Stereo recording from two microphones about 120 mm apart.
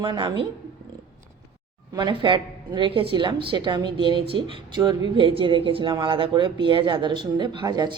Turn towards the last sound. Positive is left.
turn(degrees=-35)  # may be behind; listen again after turning